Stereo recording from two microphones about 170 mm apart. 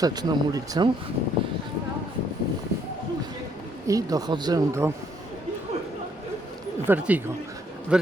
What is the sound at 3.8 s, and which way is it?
Speech, 20° right (ahead or behind).